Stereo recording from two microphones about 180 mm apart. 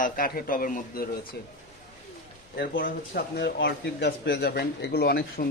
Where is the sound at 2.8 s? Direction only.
65° left (ahead or behind).